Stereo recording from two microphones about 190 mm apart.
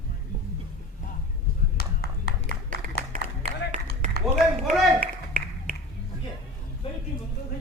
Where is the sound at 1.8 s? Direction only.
55° left (ahead or behind).